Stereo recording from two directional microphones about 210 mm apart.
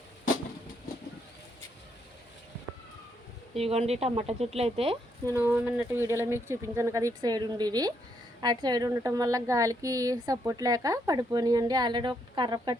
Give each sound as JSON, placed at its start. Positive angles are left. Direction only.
{"t": 3.5, "sound": "a woman's voice", "side_deg": -30}
{"t": 5.3, "sound": "a woman's voice", "side_deg": -10}